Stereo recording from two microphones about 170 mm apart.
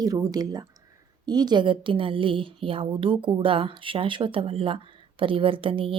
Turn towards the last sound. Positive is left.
turn(degrees=-30)  # may be behind; listen again after turning